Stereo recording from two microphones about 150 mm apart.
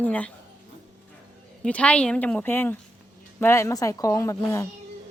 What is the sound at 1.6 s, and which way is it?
A woman's voice, 10° left (ahead or behind).